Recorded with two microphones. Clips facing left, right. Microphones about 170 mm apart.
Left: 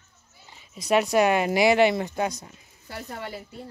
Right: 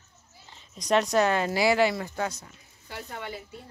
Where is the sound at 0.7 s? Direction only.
10° left (ahead or behind).